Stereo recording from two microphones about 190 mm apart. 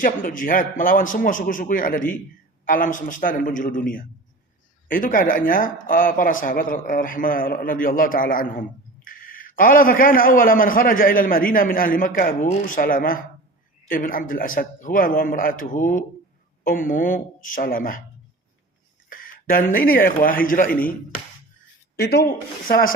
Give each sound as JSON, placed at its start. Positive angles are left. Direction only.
{"t": 0.0, "sound": "a man's voice", "side_deg": 45}
{"t": 19.0, "sound": "a sound", "side_deg": 50}
{"t": 19.7, "sound": "a man's voice", "side_deg": 50}
{"t": 21.9, "sound": "a man's voice", "side_deg": 55}